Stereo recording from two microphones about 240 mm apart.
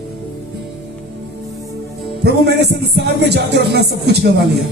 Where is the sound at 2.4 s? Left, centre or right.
Right.